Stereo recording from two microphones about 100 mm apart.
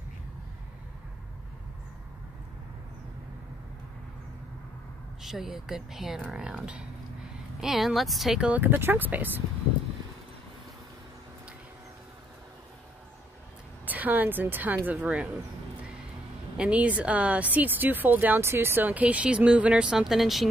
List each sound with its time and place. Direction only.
5.2 s a woman's voice: 5° right (ahead or behind)
8.5 s speech: 20° right (ahead or behind)
13.8 s a woman's voice: 15° right (ahead or behind)
16.5 s a woman's voice: 10° right (ahead or behind)